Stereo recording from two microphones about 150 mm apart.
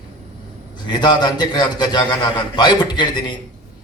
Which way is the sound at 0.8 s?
30° left (ahead or behind).